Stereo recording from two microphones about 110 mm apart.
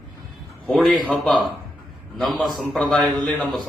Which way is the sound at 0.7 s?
Centre (ahead or behind).